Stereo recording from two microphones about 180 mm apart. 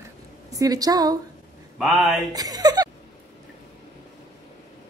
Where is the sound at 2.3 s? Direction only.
20° right (ahead or behind).